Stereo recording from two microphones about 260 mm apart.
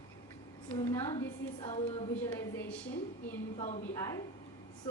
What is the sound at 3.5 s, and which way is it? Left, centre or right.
Speech, left.